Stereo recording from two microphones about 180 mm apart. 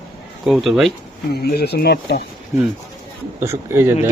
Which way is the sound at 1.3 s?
60° left (ahead or behind).